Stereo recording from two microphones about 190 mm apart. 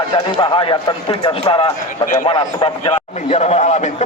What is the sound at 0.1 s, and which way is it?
A man's voice, 25° left (ahead or behind).